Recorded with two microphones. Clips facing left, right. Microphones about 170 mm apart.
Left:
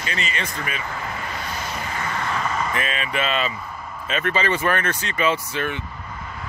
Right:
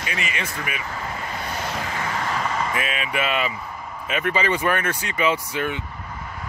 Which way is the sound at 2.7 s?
10° right (ahead or behind).